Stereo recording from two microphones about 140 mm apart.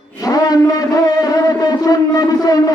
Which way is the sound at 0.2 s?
25° left (ahead or behind).